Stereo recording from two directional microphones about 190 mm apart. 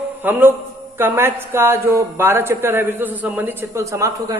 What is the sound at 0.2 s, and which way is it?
A man's voice, 10° right (ahead or behind).